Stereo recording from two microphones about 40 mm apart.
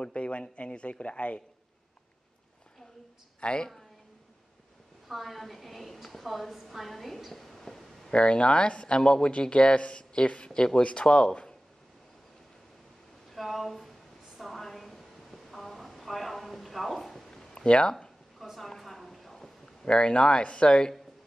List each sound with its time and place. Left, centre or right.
0.0 s speech: left
3.3 s a woman's voice: left
5.0 s a woman's voice: centre
8.1 s speech: left
13.3 s speech: centre
14.4 s a sound: centre
17.3 s a sound: centre
17.6 s speech: left
18.4 s a sound: centre